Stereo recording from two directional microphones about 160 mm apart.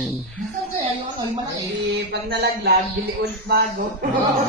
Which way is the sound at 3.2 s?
75° right (ahead or behind).